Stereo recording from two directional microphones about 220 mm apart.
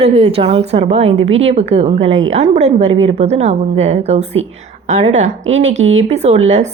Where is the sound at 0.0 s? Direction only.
25° right (ahead or behind).